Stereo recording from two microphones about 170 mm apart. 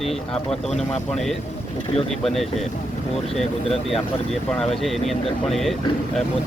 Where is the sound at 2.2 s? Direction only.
Centre (ahead or behind).